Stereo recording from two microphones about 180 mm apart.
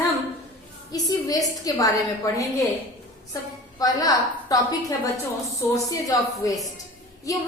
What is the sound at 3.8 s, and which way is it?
A woman's voice, 20° left (ahead or behind).